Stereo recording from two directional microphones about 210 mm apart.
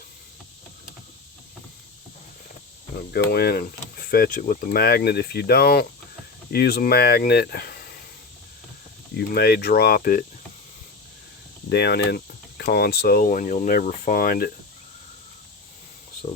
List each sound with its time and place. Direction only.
3.1 s speech: 50° left (ahead or behind)
9.1 s speech: 50° left (ahead or behind)
11.7 s speech: 50° left (ahead or behind)